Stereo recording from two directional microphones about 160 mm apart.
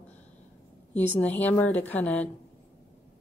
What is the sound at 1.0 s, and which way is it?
A woman's voice, 10° left (ahead or behind).